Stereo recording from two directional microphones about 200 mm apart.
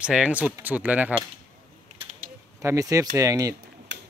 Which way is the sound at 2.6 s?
15° right (ahead or behind).